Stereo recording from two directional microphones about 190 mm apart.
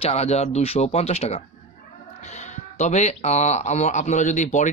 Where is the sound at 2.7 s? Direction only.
35° left (ahead or behind).